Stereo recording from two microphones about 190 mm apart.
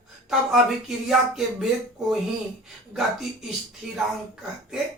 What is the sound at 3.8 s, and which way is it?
Speech, 5° right (ahead or behind).